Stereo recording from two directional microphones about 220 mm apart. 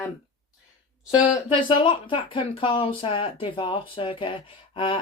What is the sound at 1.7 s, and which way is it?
Speech, 20° left (ahead or behind).